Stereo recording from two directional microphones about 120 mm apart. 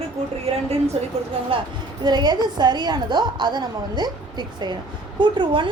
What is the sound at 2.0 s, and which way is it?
A woman's voice, 35° right (ahead or behind).